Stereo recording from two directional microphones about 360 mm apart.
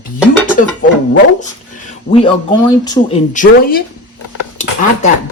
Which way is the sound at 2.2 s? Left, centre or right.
Centre.